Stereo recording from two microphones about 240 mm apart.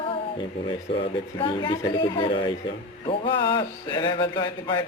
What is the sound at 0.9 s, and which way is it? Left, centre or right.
A man's voice, left.